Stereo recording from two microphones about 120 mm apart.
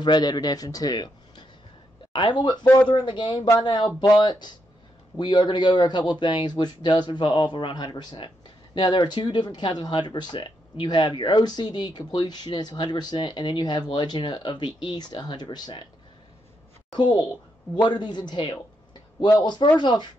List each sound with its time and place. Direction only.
0.0 s speech: 35° left (ahead or behind)
16.9 s speech: 40° left (ahead or behind)